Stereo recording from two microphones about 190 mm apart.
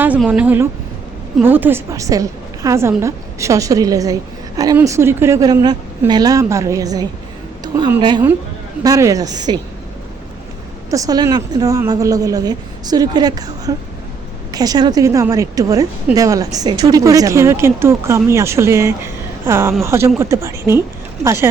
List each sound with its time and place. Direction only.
0.2 s a woman's voice: 10° right (ahead or behind)
8.8 s a woman's voice: 20° right (ahead or behind)
10.9 s a woman's voice: 20° right (ahead or behind)